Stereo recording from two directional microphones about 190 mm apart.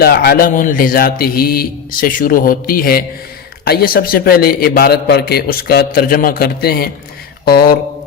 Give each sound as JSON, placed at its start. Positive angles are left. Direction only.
{"t": 0.0, "sound": "a man's voice", "side_deg": 55}